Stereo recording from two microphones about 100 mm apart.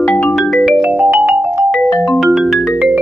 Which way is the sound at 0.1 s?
15° left (ahead or behind).